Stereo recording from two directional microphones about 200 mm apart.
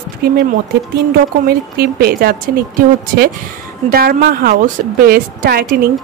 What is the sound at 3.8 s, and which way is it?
Speech, 45° right (ahead or behind).